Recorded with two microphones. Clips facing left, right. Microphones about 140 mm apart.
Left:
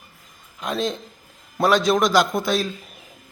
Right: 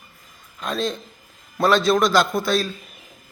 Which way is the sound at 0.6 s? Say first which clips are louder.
Even; 15° left (ahead or behind).